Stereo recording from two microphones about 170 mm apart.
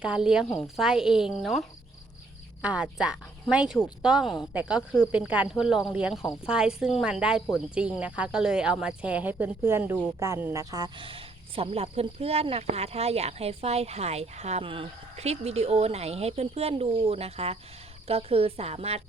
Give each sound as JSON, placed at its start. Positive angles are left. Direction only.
{"t": 0.0, "sound": "speech", "side_deg": -5}